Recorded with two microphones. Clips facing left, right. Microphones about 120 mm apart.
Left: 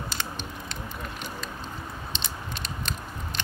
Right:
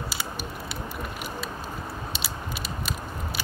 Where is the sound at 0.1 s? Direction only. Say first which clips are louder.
Right 1 dB; 10° right (ahead or behind).